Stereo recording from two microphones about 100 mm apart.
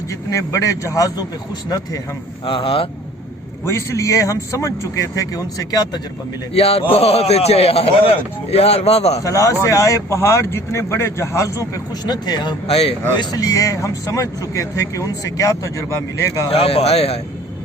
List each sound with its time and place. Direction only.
0.1 s speech: 30° left (ahead or behind)
2.4 s speech: 60° left (ahead or behind)
3.7 s speech: 30° left (ahead or behind)
6.5 s a man's voice: 80° left
9.2 s speech: 35° left (ahead or behind)
12.0 s speech: 45° left (ahead or behind)
12.6 s speech: 85° left
13.1 s speech: 35° left (ahead or behind)
16.5 s speech: 75° left (ahead or behind); by 17.2 s 90° left